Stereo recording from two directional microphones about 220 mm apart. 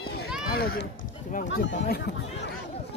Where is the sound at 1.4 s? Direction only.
55° left (ahead or behind).